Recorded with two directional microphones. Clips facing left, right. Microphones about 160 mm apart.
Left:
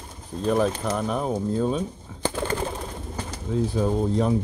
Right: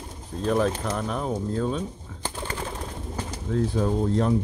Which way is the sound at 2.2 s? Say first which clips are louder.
Left 7 dB; 90° left.